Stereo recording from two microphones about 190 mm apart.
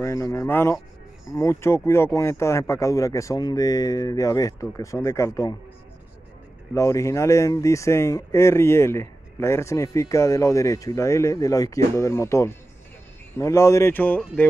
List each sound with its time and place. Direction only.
0.0 s speech: 15° left (ahead or behind)
6.7 s speech: 15° left (ahead or behind)